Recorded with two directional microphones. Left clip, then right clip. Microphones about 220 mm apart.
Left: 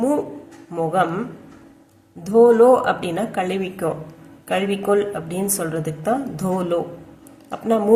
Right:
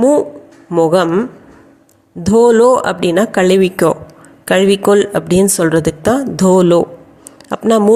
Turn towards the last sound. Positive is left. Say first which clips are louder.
# right 8 dB
turn(degrees=-40)  # may be behind; listen again after turning